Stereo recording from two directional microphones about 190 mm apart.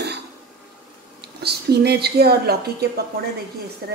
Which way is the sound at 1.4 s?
60° right (ahead or behind).